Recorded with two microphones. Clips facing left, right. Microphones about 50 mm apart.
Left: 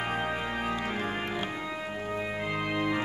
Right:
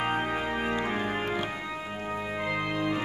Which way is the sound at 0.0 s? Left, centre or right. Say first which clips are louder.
Right 2 dB; right.